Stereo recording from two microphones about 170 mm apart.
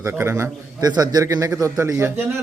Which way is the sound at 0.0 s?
15° right (ahead or behind).